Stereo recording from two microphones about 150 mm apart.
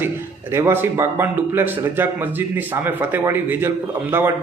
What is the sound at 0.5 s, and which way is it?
A man's voice, 15° right (ahead or behind).